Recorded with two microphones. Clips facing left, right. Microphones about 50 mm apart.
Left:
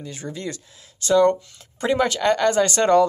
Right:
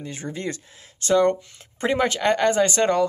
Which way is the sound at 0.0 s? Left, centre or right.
Right.